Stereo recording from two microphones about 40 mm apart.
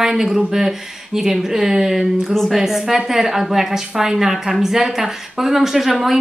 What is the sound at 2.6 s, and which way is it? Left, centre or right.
A woman's voice, centre.